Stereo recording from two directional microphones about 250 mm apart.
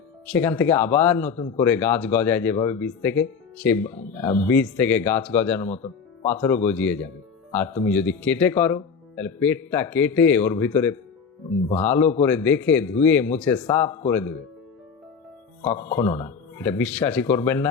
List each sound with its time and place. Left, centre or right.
0.3 s speech: centre
15.6 s speech: centre